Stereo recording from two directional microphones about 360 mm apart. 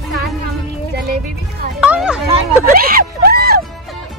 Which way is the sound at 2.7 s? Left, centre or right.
Right.